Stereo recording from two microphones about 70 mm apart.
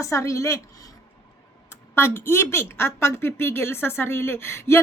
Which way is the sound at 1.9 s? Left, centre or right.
Left.